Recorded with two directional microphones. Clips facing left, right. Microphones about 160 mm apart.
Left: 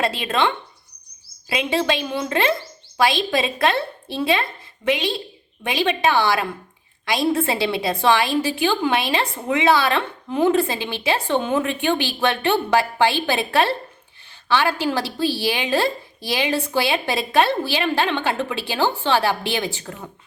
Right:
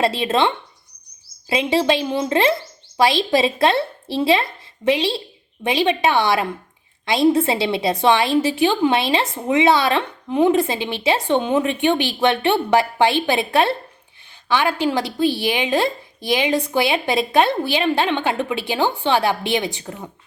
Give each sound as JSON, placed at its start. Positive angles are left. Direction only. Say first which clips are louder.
{"t": 0.0, "sound": "a woman's voice", "louder": "right 3 dB", "side_deg": -25}